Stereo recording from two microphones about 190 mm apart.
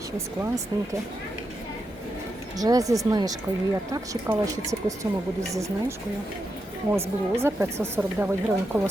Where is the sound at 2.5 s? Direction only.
20° right (ahead or behind).